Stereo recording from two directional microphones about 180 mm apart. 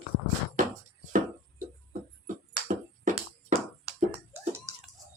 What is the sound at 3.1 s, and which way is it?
Music, 50° right (ahead or behind).